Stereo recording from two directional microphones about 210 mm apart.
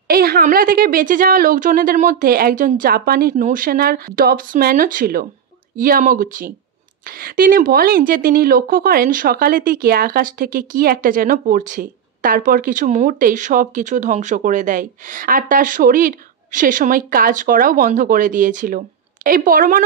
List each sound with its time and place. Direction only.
0.1 s a woman's voice: 45° right (ahead or behind)